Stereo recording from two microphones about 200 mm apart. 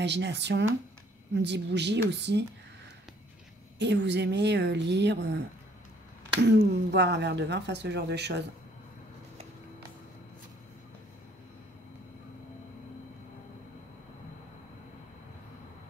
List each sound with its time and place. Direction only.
0.0 s speech: 60° right (ahead or behind)
3.7 s speech: 60° right (ahead or behind)
6.4 s speech: 55° right (ahead or behind)